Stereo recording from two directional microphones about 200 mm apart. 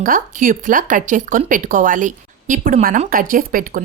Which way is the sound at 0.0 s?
45° right (ahead or behind).